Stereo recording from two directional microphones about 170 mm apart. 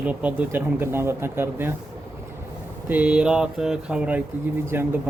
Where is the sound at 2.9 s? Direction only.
5° right (ahead or behind).